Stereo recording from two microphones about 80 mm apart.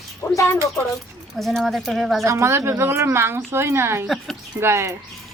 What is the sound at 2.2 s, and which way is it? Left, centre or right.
A woman's voice, right.